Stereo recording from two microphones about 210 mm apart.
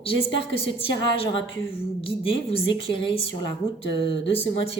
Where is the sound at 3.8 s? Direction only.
50° right (ahead or behind).